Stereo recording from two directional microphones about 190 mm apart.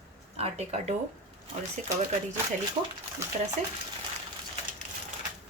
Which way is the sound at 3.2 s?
15° right (ahead or behind).